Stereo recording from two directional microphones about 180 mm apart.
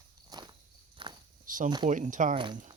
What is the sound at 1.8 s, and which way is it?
Speech, 45° right (ahead or behind).